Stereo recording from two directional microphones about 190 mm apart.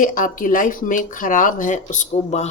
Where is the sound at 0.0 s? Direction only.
45° left (ahead or behind).